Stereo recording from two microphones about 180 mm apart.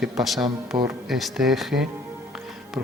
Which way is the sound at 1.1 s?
Centre (ahead or behind).